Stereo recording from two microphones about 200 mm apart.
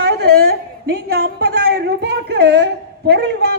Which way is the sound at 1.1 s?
50° right (ahead or behind).